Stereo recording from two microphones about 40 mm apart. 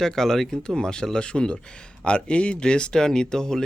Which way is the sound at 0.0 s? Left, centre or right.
Centre.